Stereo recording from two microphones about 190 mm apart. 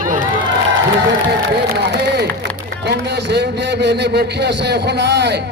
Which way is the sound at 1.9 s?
60° right (ahead or behind).